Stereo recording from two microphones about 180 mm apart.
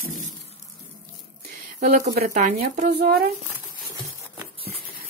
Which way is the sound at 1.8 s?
55° right (ahead or behind).